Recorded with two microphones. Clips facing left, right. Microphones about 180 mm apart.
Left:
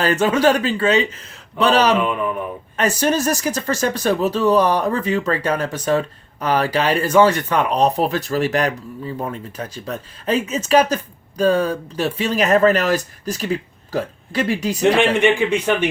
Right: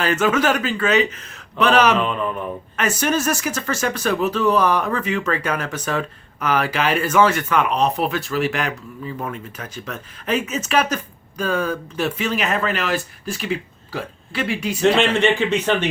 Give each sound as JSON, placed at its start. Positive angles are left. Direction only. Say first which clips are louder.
{"t": 0.0, "sound": "speech", "louder": "left 3 dB", "side_deg": 35}
{"t": 14.8, "sound": "a man's voice", "louder": "left 1 dB", "side_deg": 15}